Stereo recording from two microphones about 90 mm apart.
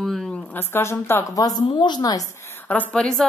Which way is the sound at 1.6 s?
55° left (ahead or behind).